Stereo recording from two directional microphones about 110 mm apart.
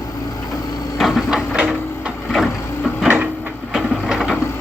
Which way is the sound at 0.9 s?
Centre (ahead or behind).